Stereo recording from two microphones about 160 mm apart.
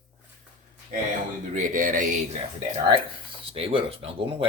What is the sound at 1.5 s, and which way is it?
Speech, 55° right (ahead or behind).